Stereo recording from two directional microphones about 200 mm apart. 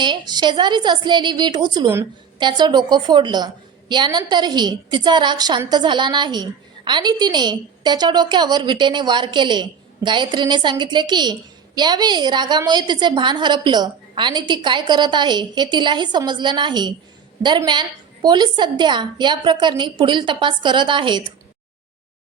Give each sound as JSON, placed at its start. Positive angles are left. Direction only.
{"t": 0.0, "sound": "a woman's voice", "side_deg": -20}